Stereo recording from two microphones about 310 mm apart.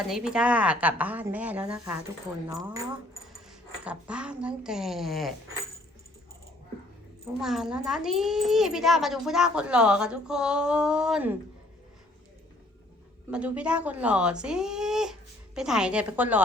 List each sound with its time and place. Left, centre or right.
0.1 s a child's voice: centre
7.4 s a child's voice: centre
13.3 s a child's voice: centre